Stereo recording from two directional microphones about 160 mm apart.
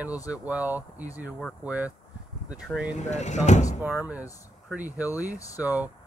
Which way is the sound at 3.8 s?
10° right (ahead or behind).